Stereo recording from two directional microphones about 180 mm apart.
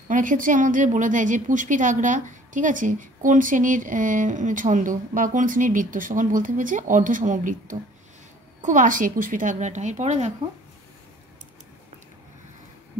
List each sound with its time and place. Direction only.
0.1 s a woman's voice: 45° right (ahead or behind)